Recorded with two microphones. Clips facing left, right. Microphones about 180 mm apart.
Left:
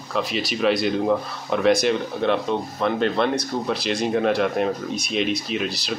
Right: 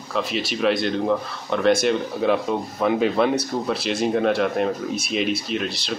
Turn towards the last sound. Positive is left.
turn(degrees=0)  # may be behind; listen again after turning